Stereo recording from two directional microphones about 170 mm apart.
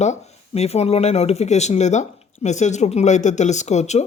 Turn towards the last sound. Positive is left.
turn(degrees=40)  # may be behind; listen again after turning